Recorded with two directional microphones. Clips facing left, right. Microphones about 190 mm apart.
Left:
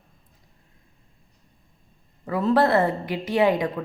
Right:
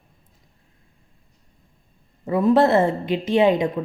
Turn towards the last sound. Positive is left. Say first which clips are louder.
# right 3 dB
turn(degrees=-25)  # may be behind; listen again after turning